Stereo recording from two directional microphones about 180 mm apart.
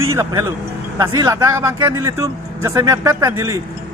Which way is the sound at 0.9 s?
20° right (ahead or behind).